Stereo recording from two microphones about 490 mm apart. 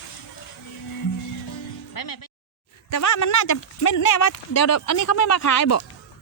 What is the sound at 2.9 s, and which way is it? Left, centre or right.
Speech, left.